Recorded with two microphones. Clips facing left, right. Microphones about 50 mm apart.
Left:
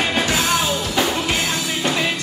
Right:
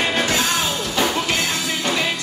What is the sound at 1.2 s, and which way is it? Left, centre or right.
Music, centre.